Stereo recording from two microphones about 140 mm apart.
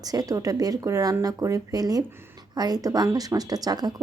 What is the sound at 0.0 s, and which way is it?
Speech, 25° right (ahead or behind).